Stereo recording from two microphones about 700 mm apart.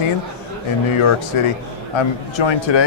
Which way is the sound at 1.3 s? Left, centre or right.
Left.